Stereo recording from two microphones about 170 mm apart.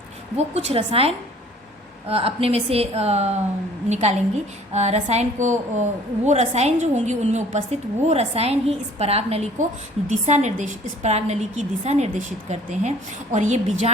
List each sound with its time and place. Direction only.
0.3 s a woman's voice: 40° right (ahead or behind)